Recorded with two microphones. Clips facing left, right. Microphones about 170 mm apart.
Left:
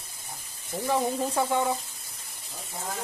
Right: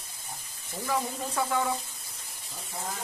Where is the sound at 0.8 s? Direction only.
25° left (ahead or behind).